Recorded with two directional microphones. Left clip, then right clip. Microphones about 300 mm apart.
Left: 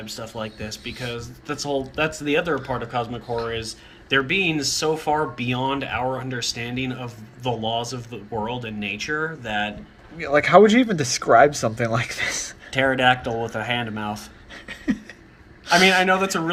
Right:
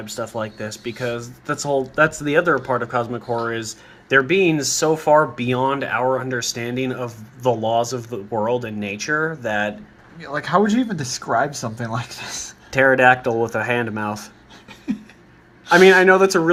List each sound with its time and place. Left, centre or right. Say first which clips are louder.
0.0 s speech: right 5 dB; centre
10.3 s speech: left 5 dB; centre
12.7 s speech: right 5 dB; centre
16.0 s speech: right 6 dB; centre